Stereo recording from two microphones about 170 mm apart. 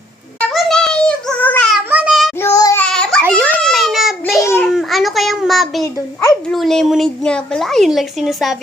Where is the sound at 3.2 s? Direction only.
15° right (ahead or behind).